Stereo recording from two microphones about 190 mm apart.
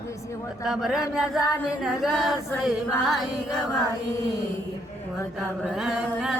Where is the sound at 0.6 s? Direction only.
Centre (ahead or behind).